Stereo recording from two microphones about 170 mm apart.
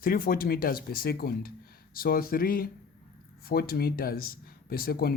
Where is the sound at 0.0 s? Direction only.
55° left (ahead or behind).